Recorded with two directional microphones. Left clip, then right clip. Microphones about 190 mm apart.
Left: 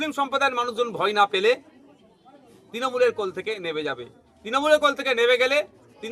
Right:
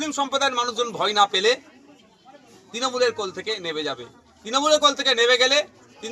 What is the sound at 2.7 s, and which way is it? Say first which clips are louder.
A man's voice: even; 25° left (ahead or behind).